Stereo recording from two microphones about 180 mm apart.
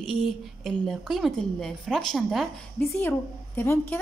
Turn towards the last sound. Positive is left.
turn(degrees=10)  # may be behind; listen again after turning